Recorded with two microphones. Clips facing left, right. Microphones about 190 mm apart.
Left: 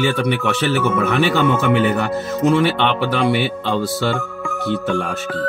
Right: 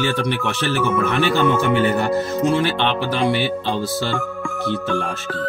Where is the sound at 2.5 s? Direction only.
55° left (ahead or behind).